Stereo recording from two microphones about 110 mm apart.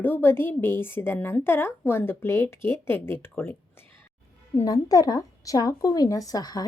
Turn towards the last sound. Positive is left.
turn(degrees=35)  # may be behind; listen again after turning